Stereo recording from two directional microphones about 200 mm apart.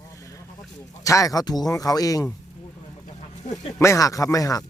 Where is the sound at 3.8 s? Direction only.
15° left (ahead or behind).